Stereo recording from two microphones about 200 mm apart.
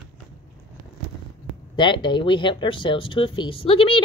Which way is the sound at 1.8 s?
25° left (ahead or behind).